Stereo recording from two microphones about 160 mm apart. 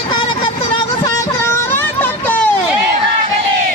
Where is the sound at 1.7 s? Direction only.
10° left (ahead or behind).